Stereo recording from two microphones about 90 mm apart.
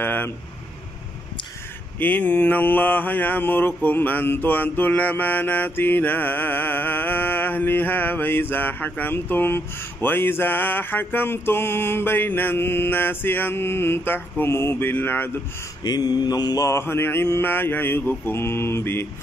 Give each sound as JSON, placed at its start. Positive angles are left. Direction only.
{"t": 0.0, "sound": "a sound", "side_deg": 20}
{"t": 2.0, "sound": "mantra", "side_deg": 20}
{"t": 15.8, "sound": "mantra", "side_deg": 50}
{"t": 16.6, "sound": "mantra", "side_deg": 30}